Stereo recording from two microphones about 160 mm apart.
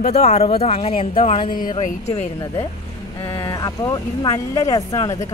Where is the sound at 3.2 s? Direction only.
30° left (ahead or behind).